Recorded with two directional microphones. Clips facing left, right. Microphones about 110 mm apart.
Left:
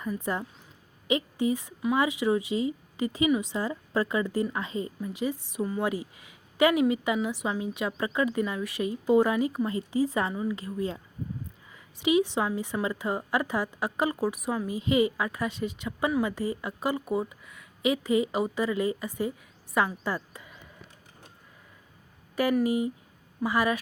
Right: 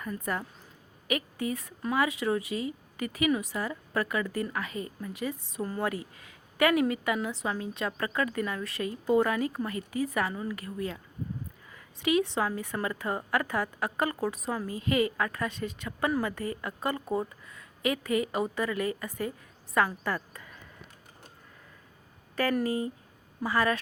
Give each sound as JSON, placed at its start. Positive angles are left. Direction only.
{"t": 0.2, "sound": "a woman's voice", "side_deg": 20}
{"t": 17.8, "sound": "a woman's voice", "side_deg": 20}
{"t": 20.1, "sound": "a sound", "side_deg": 15}
{"t": 22.6, "sound": "a woman's voice", "side_deg": 15}